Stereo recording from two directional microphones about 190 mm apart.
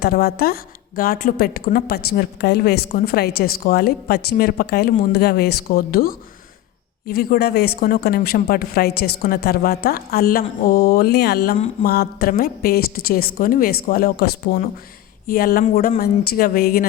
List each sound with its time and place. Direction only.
0.0 s a woman's voice: 55° left (ahead or behind)